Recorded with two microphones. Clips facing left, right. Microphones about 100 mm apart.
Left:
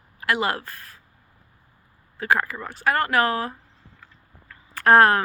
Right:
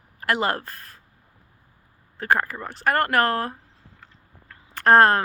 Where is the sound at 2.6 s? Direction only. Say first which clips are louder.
Right 1 dB; 45° right (ahead or behind).